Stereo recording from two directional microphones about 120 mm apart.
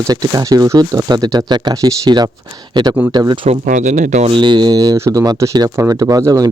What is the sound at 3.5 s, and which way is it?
Speech, 90° right.